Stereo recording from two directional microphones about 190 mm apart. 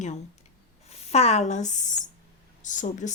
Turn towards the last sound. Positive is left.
turn(degrees=40)  # may be behind; listen again after turning